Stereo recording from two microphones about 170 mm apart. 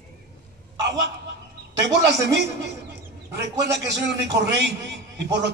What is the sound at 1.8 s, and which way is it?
A man's voice, 80° right.